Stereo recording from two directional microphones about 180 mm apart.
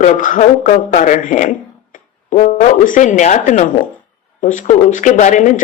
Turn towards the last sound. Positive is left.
turn(degrees=45)  # may be behind; listen again after turning